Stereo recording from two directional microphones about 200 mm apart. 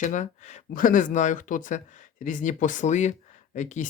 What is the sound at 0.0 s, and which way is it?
Speech, 40° left (ahead or behind).